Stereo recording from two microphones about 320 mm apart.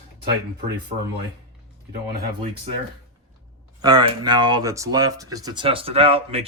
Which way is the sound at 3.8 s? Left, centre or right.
Centre.